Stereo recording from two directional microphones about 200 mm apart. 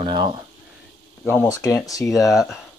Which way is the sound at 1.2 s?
10° left (ahead or behind).